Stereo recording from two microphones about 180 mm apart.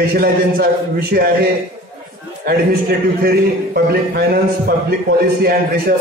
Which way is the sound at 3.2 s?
60° right (ahead or behind).